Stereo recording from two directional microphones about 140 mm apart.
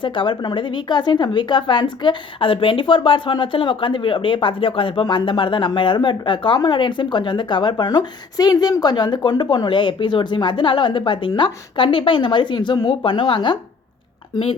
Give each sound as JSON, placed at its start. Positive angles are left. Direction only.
{"t": 0.0, "sound": "a woman's voice", "side_deg": 35}